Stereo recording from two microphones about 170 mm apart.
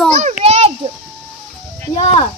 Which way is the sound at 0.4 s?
35° right (ahead or behind).